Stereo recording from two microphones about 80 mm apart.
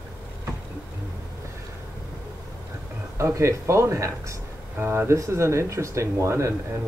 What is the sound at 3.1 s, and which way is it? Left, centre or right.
Speech, right.